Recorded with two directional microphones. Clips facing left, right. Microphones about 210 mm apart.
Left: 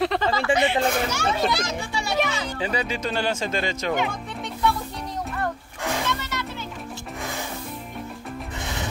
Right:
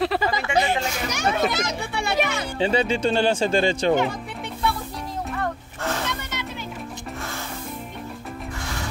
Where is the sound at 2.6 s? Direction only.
25° right (ahead or behind).